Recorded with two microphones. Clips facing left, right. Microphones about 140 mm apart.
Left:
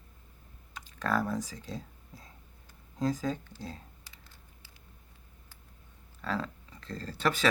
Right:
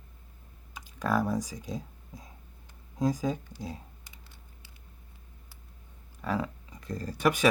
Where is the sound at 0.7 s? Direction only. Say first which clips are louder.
Right 2 dB; 10° right (ahead or behind).